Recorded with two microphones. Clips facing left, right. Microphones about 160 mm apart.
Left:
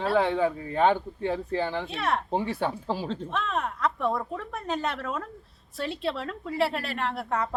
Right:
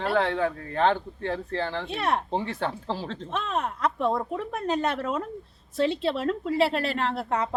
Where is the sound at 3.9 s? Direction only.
25° right (ahead or behind).